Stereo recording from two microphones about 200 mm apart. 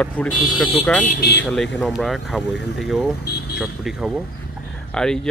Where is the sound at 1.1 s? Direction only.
50° left (ahead or behind).